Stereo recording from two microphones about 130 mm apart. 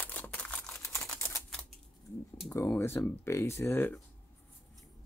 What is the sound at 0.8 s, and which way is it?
Typewriter, 20° left (ahead or behind).